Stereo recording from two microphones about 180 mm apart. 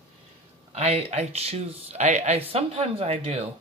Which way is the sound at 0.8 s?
35° right (ahead or behind).